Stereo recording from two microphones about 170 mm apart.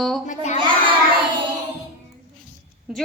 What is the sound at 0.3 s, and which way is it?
Speech, 45° left (ahead or behind).